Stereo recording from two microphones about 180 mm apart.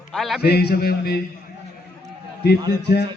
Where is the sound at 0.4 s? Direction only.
60° left (ahead or behind).